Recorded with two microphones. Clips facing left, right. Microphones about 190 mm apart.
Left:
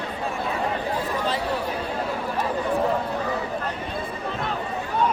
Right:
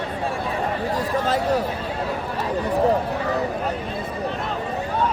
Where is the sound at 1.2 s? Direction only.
45° right (ahead or behind).